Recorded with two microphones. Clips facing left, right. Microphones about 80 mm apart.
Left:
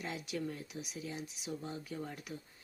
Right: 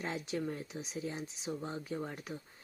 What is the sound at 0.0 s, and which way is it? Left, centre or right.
Speech, right.